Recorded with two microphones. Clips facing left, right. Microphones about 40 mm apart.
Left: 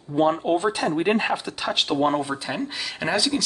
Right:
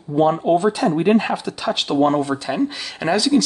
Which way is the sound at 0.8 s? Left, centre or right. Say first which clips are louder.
Right 5 dB; centre.